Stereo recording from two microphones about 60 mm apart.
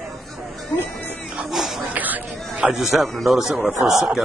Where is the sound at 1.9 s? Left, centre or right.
Right.